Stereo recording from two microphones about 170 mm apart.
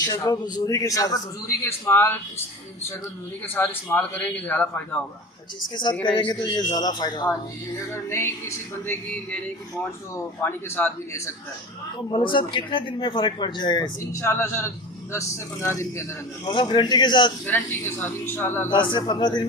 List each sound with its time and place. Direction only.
0.1 s a man's voice: 20° left (ahead or behind)
3.4 s music: 10° left (ahead or behind)
5.7 s a man's voice: 25° left (ahead or behind)
7.9 s music: 15° left (ahead or behind)
12.1 s a man's voice: 30° left (ahead or behind)
15.1 s music: 15° left (ahead or behind)
16.5 s a man's voice: 25° left (ahead or behind)
17.4 s music: 10° left (ahead or behind)
18.7 s a man's voice: 25° left (ahead or behind)